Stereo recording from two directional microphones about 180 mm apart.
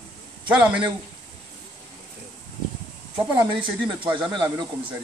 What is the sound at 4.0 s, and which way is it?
Speech, 25° right (ahead or behind).